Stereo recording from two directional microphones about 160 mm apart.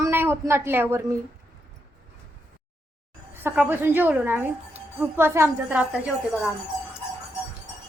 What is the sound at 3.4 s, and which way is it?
A woman's voice, 10° right (ahead or behind).